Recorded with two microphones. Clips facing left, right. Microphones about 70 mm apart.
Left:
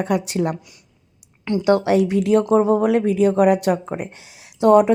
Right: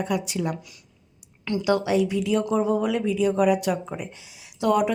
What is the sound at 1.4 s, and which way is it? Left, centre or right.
A woman's voice, left.